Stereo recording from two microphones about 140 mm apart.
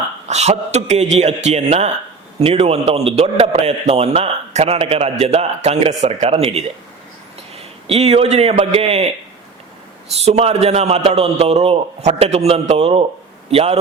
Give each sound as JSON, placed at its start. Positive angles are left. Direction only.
{"t": 0.3, "sound": "a man's voice", "side_deg": -50}
{"t": 7.9, "sound": "a man's voice", "side_deg": -50}
{"t": 10.2, "sound": "a man's voice", "side_deg": -50}